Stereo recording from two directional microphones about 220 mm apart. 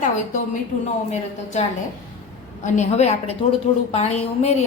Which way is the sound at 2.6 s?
30° left (ahead or behind).